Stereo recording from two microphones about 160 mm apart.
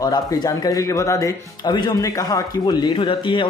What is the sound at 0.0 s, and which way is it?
Speech, 25° left (ahead or behind).